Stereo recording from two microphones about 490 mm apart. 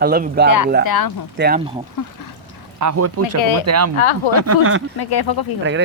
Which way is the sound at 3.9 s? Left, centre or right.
Left.